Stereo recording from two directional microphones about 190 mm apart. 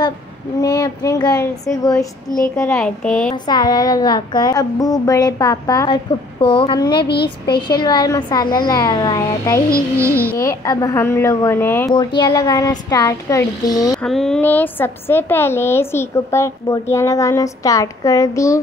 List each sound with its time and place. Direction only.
0.6 s a child's voice: 20° left (ahead or behind)
3.4 s speech: 20° left (ahead or behind)
9.7 s music: 15° right (ahead or behind)
10.4 s a woman's voice: 15° left (ahead or behind)
11.9 s speech: 25° left (ahead or behind)
14.0 s a woman's voice: centre (ahead or behind)